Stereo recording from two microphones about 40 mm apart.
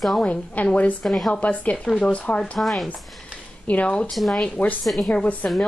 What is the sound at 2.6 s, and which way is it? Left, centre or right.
Speech, centre.